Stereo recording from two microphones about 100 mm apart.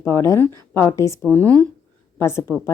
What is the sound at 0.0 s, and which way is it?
A woman's voice, 25° left (ahead or behind).